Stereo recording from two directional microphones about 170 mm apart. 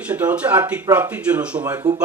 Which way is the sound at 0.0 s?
10° right (ahead or behind).